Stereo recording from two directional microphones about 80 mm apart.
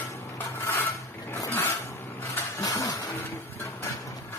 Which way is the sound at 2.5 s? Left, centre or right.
Left.